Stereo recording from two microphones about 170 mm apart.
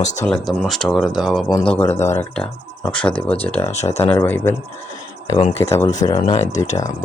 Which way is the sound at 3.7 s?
40° left (ahead or behind).